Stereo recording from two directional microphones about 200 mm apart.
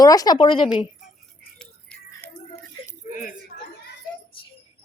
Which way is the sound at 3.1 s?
40° left (ahead or behind).